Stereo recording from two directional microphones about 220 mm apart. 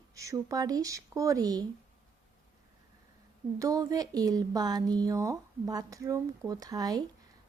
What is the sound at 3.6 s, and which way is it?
Speech, 15° right (ahead or behind).